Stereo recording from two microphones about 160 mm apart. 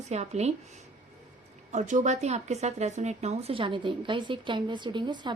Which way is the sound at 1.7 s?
50° right (ahead or behind).